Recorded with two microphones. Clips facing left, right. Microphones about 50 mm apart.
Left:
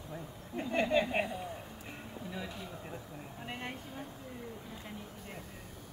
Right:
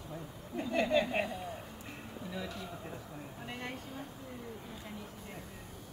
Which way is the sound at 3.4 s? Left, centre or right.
Centre.